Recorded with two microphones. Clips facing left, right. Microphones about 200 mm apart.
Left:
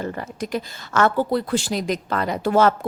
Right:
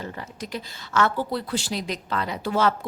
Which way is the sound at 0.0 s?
50° left (ahead or behind).